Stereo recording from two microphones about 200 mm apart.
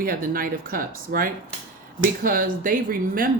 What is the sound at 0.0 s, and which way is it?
Speech, 45° right (ahead or behind).